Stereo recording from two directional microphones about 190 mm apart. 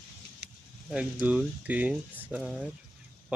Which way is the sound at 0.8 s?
5° right (ahead or behind).